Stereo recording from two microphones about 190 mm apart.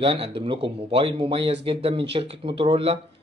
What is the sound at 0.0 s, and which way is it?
Speech, 30° right (ahead or behind).